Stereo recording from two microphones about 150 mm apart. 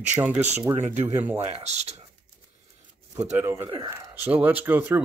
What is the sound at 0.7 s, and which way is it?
Speech, 50° right (ahead or behind).